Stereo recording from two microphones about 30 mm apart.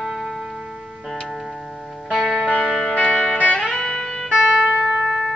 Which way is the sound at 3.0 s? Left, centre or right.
Right.